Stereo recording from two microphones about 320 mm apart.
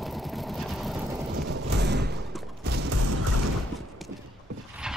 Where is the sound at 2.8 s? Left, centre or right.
Right.